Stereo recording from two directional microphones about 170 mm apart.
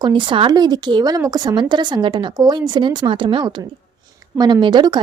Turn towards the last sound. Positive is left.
turn(degrees=-25)  # may be behind; listen again after turning